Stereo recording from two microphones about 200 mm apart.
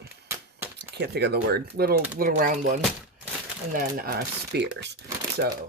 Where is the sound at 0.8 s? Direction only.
55° right (ahead or behind).